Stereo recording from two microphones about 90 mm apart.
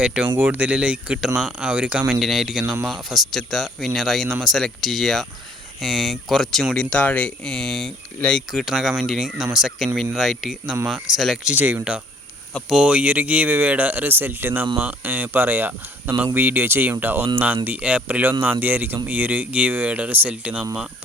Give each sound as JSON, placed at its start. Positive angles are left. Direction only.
{"t": 0.0, "sound": "speech", "side_deg": -10}
{"t": 2.1, "sound": "speech", "side_deg": 0}
{"t": 11.5, "sound": "speech", "side_deg": -20}